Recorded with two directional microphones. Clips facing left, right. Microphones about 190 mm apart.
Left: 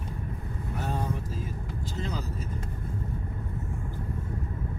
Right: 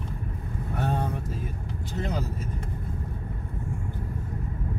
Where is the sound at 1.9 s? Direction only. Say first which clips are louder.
Right 5 dB; 60° right (ahead or behind).